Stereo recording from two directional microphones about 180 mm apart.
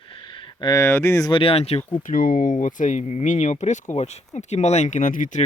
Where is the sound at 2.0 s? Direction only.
50° left (ahead or behind).